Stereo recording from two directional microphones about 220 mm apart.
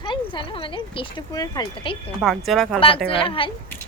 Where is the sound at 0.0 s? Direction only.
20° left (ahead or behind).